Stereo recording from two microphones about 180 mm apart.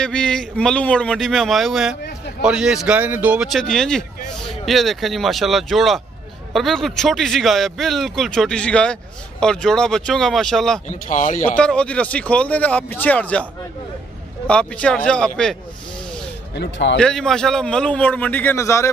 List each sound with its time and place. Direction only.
0.0 s a man's voice: 5° left (ahead or behind)
10.9 s speech: 45° left (ahead or behind)
11.5 s speech: 5° left (ahead or behind)
14.5 s a man's voice: 5° left (ahead or behind)
16.5 s speech: 85° left
17.0 s a man's voice: centre (ahead or behind)